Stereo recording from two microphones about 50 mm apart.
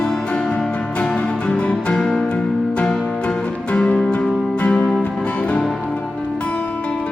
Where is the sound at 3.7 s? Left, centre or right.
Left.